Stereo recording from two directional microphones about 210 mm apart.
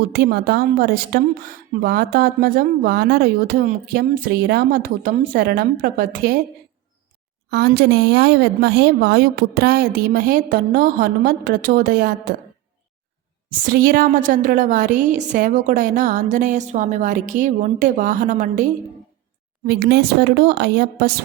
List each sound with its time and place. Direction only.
0.1 s a woman's voice: 50° right (ahead or behind)
7.5 s a woman's voice: 50° right (ahead or behind)
13.7 s a woman's voice: 45° right (ahead or behind)
19.6 s a woman's voice: 50° right (ahead or behind)